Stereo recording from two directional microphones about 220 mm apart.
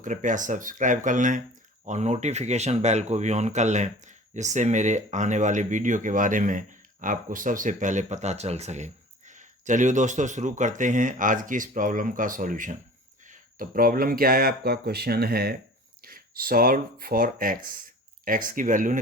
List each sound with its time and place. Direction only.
0.0 s speech: 35° right (ahead or behind)